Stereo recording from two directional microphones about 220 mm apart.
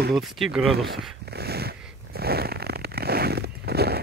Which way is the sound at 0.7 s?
45° right (ahead or behind).